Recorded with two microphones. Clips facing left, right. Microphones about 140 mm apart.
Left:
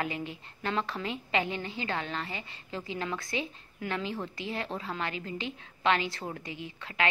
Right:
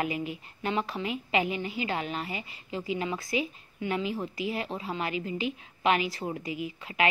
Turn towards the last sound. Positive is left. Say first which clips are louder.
# right 4 dB
turn(degrees=-10)  # may be behind; listen again after turning